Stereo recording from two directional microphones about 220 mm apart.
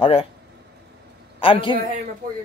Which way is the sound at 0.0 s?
25° left (ahead or behind).